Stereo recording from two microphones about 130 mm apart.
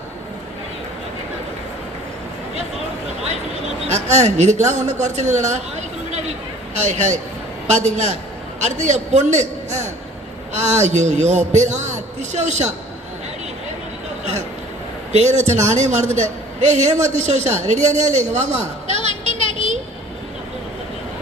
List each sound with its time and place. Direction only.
4.1 s a woman's voice: 60° right (ahead or behind)
15.1 s a woman's voice: 60° right (ahead or behind)
18.9 s a sound: 45° left (ahead or behind)